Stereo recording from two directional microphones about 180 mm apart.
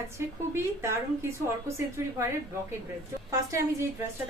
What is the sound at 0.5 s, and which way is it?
A woman's voice, 15° right (ahead or behind).